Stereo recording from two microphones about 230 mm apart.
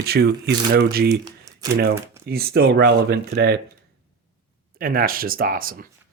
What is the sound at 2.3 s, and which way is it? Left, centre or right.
Speech, right.